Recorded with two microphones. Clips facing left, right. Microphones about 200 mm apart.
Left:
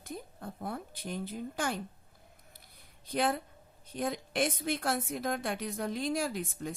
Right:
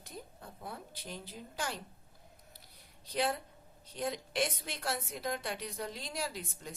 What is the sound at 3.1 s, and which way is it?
A woman's voice, 55° left (ahead or behind).